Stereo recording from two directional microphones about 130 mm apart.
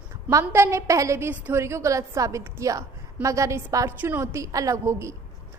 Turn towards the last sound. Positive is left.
turn(degrees=-20)  # may be behind; listen again after turning